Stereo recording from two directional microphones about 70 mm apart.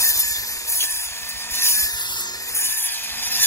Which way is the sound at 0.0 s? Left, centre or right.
Left.